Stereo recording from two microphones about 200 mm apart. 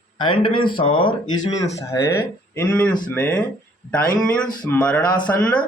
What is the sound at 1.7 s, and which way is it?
Speech, 15° left (ahead or behind).